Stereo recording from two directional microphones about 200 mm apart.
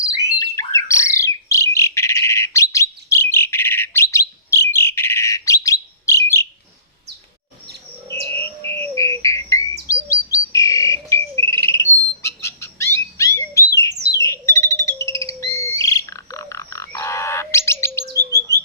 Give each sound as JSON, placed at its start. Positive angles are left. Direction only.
{"t": 0.3, "sound": "bird", "side_deg": 15}
{"t": 8.1, "sound": "bird", "side_deg": 10}
{"t": 18.1, "sound": "bird", "side_deg": -15}